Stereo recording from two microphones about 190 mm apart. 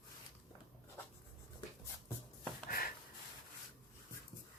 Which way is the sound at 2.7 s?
50° left (ahead or behind).